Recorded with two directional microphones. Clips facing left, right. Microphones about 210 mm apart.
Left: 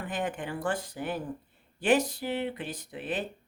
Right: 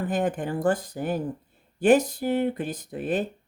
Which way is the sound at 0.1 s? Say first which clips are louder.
Right 5 dB; 40° right (ahead or behind).